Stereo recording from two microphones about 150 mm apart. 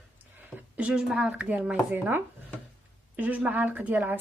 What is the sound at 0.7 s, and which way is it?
Speech, 5° right (ahead or behind).